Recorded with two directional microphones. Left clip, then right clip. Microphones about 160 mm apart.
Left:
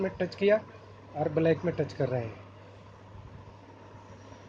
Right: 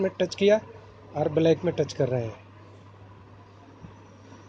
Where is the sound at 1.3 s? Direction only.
55° right (ahead or behind).